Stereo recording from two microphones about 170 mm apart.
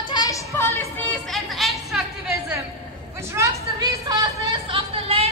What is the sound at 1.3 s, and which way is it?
Chatter, centre (ahead or behind).